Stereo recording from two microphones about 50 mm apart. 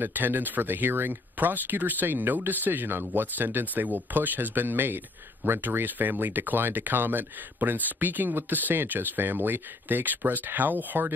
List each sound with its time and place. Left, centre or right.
0.0 s speech: right